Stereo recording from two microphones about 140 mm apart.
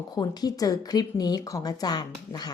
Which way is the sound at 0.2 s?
30° left (ahead or behind).